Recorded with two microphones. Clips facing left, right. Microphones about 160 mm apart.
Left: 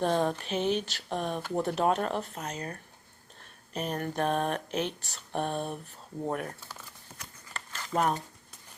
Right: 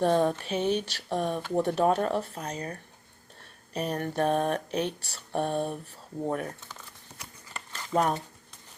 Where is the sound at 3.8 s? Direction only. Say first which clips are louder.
Right 3 dB; 35° right (ahead or behind).